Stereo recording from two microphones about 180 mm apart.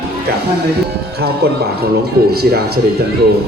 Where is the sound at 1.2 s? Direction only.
60° right (ahead or behind).